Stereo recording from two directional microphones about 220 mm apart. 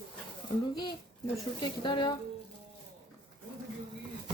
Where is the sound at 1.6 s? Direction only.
20° left (ahead or behind).